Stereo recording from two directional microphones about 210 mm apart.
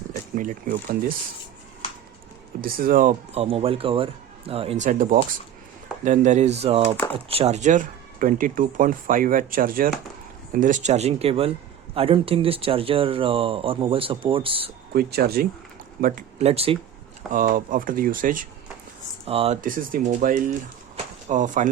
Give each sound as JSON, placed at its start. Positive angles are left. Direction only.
{"t": 0.3, "sound": "speech", "side_deg": -40}
{"t": 2.6, "sound": "speech", "side_deg": -45}
{"t": 14.9, "sound": "speech", "side_deg": -45}
{"t": 17.3, "sound": "speech", "side_deg": -40}
{"t": 19.2, "sound": "speech", "side_deg": -25}
{"t": 19.6, "sound": "speech", "side_deg": -40}